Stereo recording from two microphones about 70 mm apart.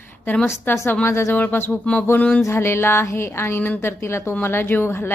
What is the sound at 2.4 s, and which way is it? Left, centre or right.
A woman's voice, left.